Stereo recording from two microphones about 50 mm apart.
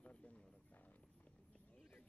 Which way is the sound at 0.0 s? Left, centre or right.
Left.